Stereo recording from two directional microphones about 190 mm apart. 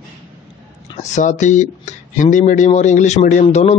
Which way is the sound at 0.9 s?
40° left (ahead or behind).